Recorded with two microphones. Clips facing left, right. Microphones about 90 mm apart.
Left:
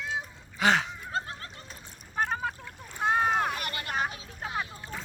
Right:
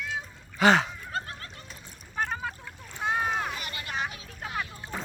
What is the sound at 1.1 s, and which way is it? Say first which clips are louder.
Goat: left 1 dB; 25° left (ahead or behind).